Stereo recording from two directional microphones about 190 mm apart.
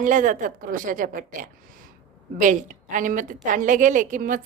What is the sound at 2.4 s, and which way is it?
A woman's voice, 40° right (ahead or behind).